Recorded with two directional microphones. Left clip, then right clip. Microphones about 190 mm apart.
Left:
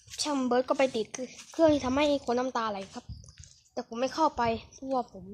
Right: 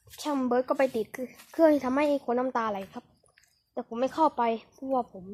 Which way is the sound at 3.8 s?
25° right (ahead or behind).